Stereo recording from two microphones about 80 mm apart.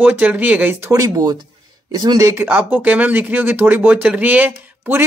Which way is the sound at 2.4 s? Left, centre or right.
Right.